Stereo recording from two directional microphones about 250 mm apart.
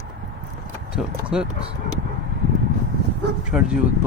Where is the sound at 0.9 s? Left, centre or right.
Centre.